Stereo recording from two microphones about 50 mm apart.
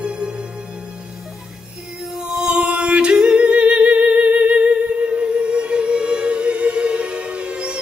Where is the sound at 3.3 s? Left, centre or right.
Right.